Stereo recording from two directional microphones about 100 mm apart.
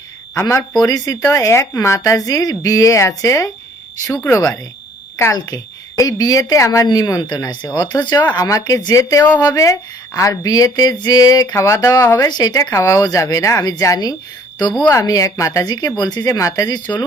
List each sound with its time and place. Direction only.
0.3 s speech: 25° left (ahead or behind); by 16.9 s 45° left (ahead or behind)